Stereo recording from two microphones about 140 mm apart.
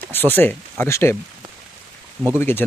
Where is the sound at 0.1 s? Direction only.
15° left (ahead or behind).